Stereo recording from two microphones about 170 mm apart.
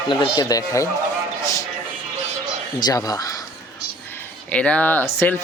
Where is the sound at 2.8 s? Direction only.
20° left (ahead or behind).